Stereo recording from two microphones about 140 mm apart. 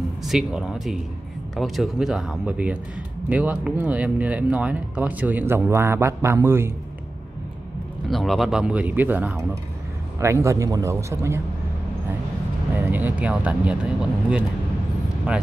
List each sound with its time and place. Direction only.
0.2 s speech: 5° right (ahead or behind)
8.1 s speech: centre (ahead or behind); by 11.4 s 20° right (ahead or behind)
12.7 s speech: 15° right (ahead or behind)